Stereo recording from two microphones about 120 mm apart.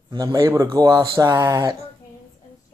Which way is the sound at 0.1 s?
30° right (ahead or behind).